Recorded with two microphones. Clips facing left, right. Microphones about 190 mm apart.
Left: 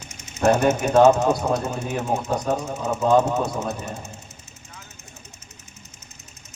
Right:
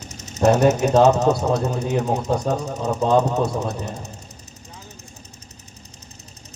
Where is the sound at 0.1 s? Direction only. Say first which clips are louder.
Right 2 dB; 40° right (ahead or behind).